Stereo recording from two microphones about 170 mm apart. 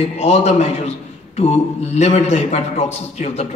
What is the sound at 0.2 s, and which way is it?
A man's voice, 40° left (ahead or behind).